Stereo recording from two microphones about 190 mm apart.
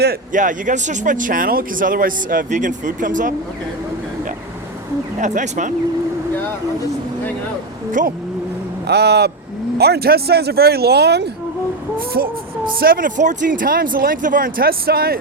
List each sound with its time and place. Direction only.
0.3 s speech: 40° right (ahead or behind)
5.2 s speech: 40° right (ahead or behind)
8.0 s speech: 45° right (ahead or behind)
8.9 s speech: 60° right (ahead or behind)